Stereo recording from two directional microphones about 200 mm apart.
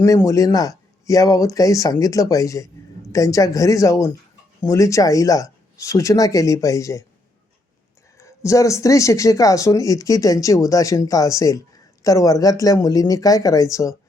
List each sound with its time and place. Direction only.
0.0 s speech: 15° left (ahead or behind)
8.2 s speech: 15° left (ahead or behind)